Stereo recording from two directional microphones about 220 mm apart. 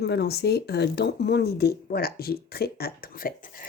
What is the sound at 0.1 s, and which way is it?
Speech, 50° left (ahead or behind).